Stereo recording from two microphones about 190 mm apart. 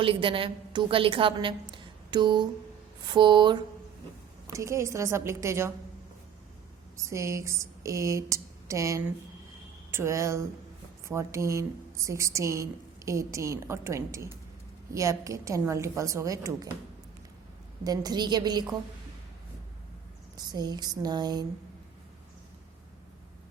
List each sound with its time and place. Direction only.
0.0 s a woman's voice: 30° right (ahead or behind)
7.0 s speech: 15° right (ahead or behind)
17.8 s a woman's voice: 20° right (ahead or behind)
20.3 s a woman's voice: 20° right (ahead or behind)